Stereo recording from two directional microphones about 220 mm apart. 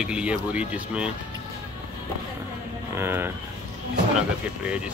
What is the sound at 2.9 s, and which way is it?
Speech, 10° right (ahead or behind).